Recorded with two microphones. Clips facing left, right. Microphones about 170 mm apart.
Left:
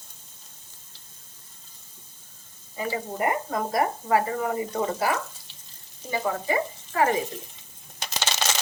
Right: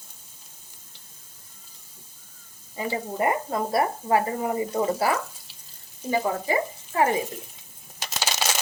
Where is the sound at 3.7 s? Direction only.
25° right (ahead or behind).